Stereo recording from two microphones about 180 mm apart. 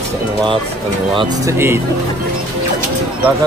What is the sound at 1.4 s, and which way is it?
Speech, 15° right (ahead or behind).